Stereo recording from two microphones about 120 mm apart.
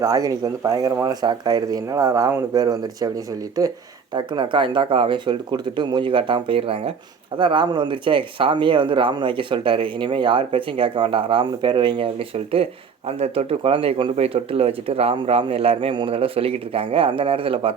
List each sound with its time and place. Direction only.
0.0 s speech: 30° right (ahead or behind)
4.1 s speech: 40° right (ahead or behind)
13.1 s speech: 60° right (ahead or behind)